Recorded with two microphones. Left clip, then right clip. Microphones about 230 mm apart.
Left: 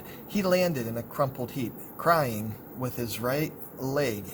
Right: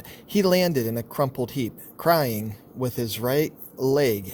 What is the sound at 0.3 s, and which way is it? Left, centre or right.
Speech, right.